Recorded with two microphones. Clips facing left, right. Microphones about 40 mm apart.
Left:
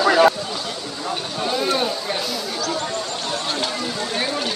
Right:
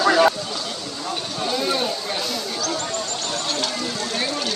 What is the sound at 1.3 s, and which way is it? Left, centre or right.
Speech, centre.